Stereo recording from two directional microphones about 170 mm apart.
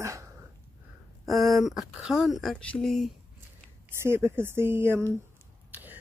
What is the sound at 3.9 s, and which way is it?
Speech, 15° right (ahead or behind).